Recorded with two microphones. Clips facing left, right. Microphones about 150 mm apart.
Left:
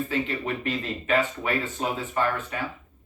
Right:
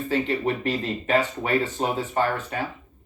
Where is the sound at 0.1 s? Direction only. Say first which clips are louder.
Right 4 dB; 35° right (ahead or behind).